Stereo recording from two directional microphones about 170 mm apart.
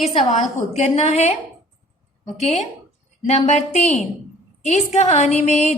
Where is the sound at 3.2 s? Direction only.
40° left (ahead or behind).